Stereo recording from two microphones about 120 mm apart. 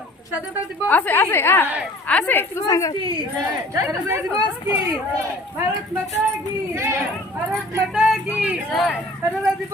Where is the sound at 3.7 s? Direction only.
20° right (ahead or behind).